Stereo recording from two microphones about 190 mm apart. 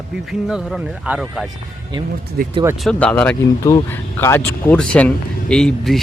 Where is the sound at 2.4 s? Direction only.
50° right (ahead or behind).